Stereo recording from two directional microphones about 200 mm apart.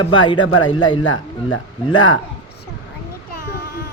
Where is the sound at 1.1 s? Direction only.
90° left.